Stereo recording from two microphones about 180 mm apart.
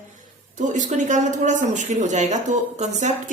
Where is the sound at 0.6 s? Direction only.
45° right (ahead or behind).